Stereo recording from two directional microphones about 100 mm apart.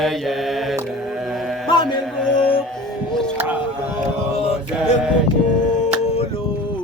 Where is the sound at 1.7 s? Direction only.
50° left (ahead or behind).